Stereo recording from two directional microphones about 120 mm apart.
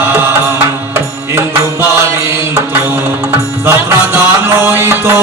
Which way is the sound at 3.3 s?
20° right (ahead or behind).